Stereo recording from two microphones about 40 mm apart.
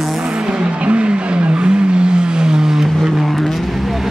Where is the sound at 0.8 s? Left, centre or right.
Right; by 3.2 s centre.